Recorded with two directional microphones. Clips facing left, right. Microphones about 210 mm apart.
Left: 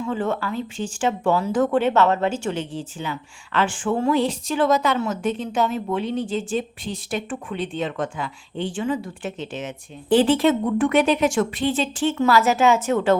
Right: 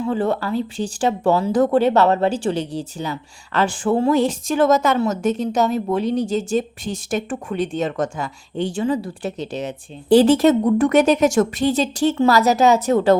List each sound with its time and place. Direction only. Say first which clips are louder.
0.0 s a woman's voice: right 4 dB; 35° right (ahead or behind)
4.2 s a woman's voice: right 4 dB; 45° right (ahead or behind)